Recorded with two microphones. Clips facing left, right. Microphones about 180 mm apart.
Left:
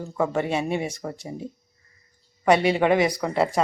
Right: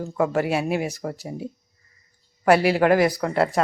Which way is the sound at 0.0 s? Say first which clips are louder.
Right 2 dB; 5° right (ahead or behind).